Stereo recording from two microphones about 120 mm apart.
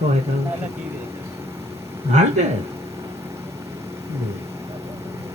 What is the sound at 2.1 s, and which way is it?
Speech, 70° right (ahead or behind).